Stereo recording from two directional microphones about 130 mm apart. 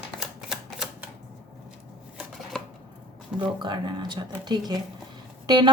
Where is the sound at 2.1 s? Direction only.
5° left (ahead or behind).